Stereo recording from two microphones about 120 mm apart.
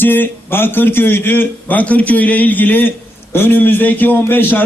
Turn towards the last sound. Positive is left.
turn(degrees=15)  # may be behind; listen again after turning